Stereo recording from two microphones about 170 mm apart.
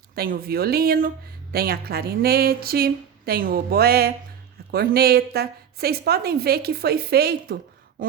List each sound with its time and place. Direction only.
0.2 s a woman's voice: 60° right (ahead or behind)